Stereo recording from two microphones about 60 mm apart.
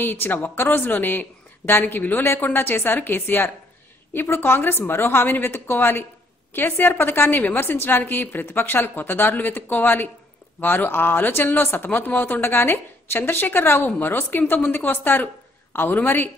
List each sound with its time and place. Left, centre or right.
0.0 s speech: left